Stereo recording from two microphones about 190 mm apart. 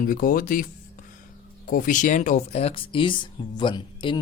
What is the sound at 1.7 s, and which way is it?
Speech, 45° left (ahead or behind).